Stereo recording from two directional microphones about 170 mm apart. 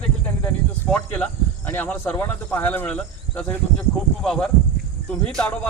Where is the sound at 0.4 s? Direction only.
5° left (ahead or behind).